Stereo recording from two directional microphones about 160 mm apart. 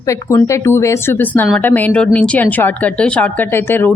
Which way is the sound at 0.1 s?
15° left (ahead or behind).